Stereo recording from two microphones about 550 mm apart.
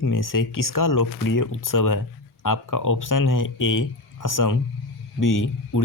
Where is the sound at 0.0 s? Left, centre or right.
Left.